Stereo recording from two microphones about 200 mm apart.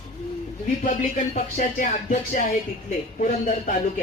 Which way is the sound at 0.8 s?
40° left (ahead or behind).